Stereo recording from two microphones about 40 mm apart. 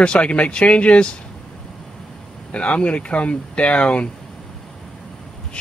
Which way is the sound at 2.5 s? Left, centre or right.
Left.